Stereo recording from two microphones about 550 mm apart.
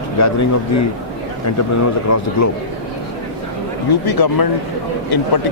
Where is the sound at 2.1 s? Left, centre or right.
Left.